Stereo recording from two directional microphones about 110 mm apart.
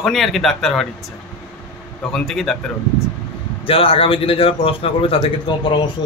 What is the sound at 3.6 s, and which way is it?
A man's voice, 55° left (ahead or behind).